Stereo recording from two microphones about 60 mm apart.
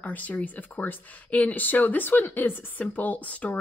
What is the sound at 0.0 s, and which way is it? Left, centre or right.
Speech, left.